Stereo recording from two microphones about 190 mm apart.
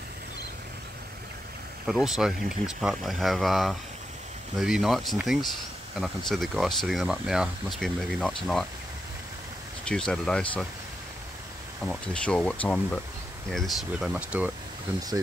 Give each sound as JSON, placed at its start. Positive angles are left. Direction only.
{"t": 1.9, "sound": "speech", "side_deg": 0}
{"t": 9.8, "sound": "speech", "side_deg": 5}
{"t": 11.8, "sound": "speech", "side_deg": 5}